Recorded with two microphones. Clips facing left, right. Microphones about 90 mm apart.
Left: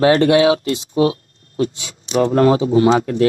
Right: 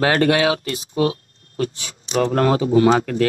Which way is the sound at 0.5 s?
30° left (ahead or behind).